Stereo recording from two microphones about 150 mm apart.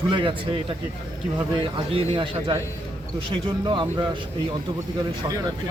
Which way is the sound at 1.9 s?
40° right (ahead or behind).